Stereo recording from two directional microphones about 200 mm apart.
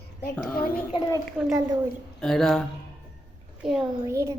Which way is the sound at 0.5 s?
45° left (ahead or behind).